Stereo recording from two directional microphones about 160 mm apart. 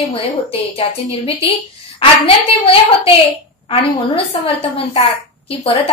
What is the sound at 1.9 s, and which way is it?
A woman's voice, 35° left (ahead or behind).